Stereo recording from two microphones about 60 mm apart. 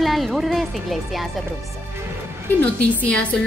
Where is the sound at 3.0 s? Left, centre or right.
Left.